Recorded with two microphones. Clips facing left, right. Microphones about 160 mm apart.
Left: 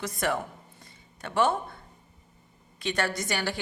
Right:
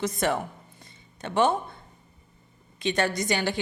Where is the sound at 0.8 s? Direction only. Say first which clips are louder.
Right 4 dB; 20° right (ahead or behind).